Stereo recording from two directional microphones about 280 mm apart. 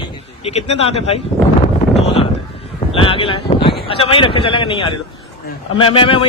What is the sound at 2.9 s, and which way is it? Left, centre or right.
Speech, centre.